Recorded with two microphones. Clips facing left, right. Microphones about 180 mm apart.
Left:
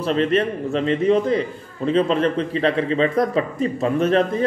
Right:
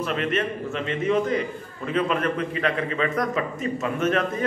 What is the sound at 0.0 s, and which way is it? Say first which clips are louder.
A man's voice: left 6 dB; 30° left (ahead or behind).